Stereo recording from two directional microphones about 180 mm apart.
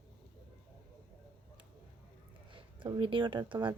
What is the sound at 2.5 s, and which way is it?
Speech, 30° right (ahead or behind).